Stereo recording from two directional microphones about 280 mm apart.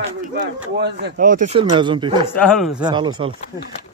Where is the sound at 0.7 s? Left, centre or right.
Right; by 2.1 s centre.